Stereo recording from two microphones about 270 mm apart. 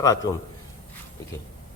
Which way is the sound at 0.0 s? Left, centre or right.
Centre.